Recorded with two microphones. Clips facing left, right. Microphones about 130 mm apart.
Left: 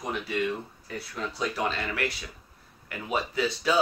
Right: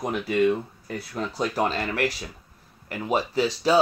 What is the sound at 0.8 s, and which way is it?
Speech, 45° right (ahead or behind).